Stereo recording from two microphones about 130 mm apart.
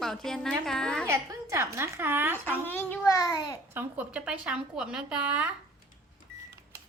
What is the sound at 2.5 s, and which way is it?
A child's voice, 15° left (ahead or behind).